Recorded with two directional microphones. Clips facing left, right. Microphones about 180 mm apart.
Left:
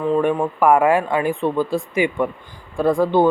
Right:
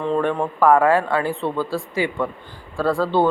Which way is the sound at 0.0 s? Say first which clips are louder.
Left 3 dB; 10° left (ahead or behind).